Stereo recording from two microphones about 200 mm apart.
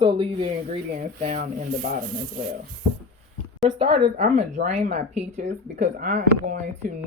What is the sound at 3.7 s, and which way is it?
Speech, 25° right (ahead or behind).